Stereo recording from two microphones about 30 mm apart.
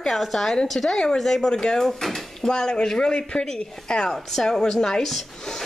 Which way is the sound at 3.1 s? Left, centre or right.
Left.